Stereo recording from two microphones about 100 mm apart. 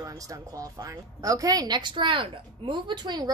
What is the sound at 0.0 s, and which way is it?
A woman's voice, 35° right (ahead or behind).